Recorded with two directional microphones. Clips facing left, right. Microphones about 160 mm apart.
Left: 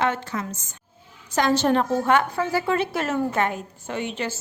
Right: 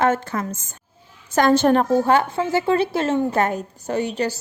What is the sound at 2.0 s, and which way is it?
A woman's voice, 30° right (ahead or behind).